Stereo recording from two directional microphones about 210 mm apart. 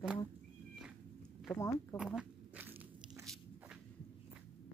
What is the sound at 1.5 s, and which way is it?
Speech, 15° left (ahead or behind).